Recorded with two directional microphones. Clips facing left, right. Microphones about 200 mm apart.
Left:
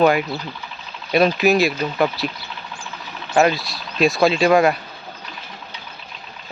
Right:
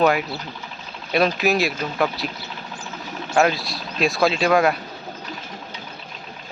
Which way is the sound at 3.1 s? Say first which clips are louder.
Right 3 dB; 45° right (ahead or behind).